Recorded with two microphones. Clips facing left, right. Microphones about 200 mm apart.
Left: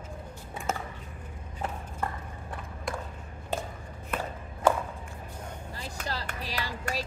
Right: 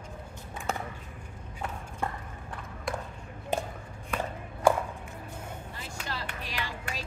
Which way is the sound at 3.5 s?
15° right (ahead or behind).